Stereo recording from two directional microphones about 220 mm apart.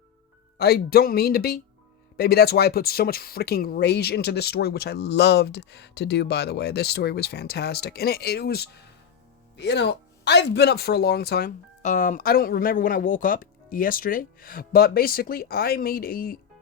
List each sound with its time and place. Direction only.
0.6 s speech: 45° left (ahead or behind)